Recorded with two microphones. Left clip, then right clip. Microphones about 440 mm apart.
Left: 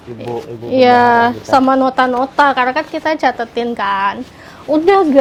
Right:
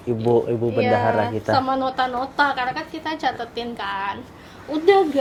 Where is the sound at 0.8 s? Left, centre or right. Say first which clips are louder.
Left 12 dB; left.